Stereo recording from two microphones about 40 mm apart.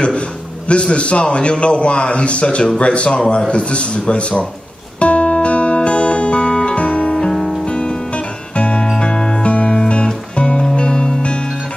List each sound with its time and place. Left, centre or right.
0.7 s a man's voice: left
5.0 s music: left